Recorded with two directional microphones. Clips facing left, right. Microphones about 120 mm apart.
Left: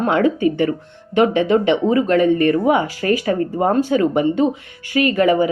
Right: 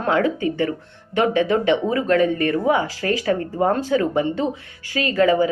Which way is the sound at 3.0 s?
30° left (ahead or behind).